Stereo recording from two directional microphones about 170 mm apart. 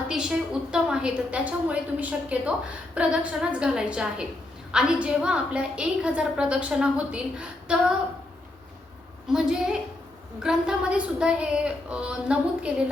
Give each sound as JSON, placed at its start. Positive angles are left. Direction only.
{"t": 0.1, "sound": "a woman's voice", "side_deg": -5}
{"t": 9.2, "sound": "a woman's voice", "side_deg": -5}